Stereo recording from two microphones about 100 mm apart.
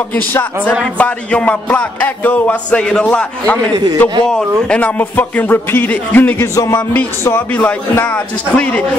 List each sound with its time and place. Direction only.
0.1 s a man's voice: 20° left (ahead or behind)
3.7 s a man's voice: 40° right (ahead or behind)
4.3 s a man's voice: 5° left (ahead or behind); by 6.8 s 30° left (ahead or behind)
7.2 s a man's voice: 20° left (ahead or behind)